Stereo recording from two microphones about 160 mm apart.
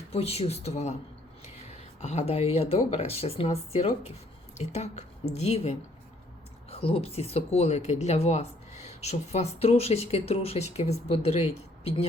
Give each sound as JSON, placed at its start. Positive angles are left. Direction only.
{"t": 0.1, "sound": "speech", "side_deg": 40}